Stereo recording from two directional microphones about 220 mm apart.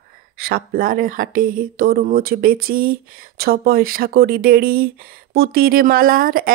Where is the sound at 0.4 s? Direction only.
45° right (ahead or behind).